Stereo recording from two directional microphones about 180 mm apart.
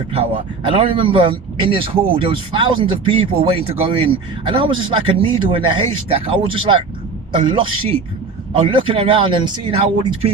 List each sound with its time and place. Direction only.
0.7 s speech: 30° right (ahead or behind)